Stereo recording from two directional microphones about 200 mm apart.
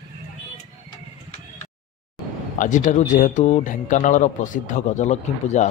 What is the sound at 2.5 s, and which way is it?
A man's voice, 40° left (ahead or behind).